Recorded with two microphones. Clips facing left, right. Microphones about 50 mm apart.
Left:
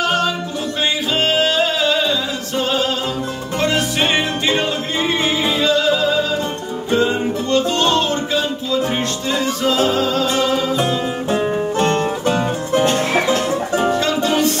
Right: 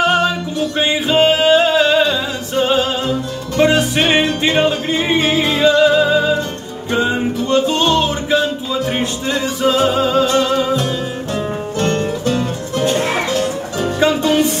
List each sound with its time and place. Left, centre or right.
0.0 s music: centre
4.1 s music: centre
10.2 s music: centre
11.3 s music: left
13.9 s music: centre